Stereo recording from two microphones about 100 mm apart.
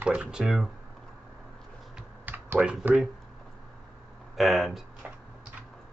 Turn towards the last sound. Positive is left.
turn(degrees=0)  # may be behind; listen again after turning